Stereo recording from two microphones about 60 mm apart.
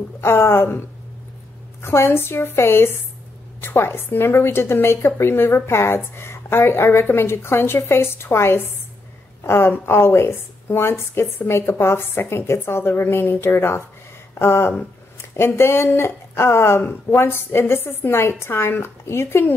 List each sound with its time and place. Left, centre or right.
0.2 s a woman's voice: left